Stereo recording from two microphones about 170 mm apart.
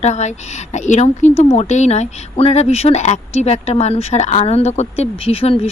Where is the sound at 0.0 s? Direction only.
40° left (ahead or behind).